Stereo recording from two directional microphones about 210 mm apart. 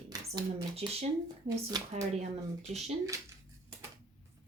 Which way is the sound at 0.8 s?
30° right (ahead or behind).